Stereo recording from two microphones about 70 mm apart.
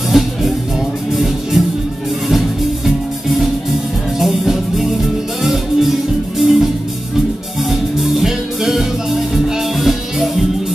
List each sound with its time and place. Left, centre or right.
0.1 s music: centre
8.0 s music: centre